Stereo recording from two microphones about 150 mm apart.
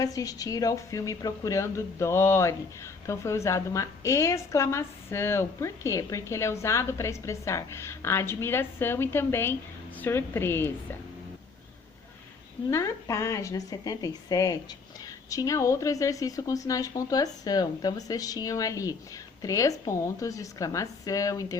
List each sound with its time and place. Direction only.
0.0 s a woman's voice: 25° left (ahead or behind)
12.7 s a woman's voice: 20° left (ahead or behind)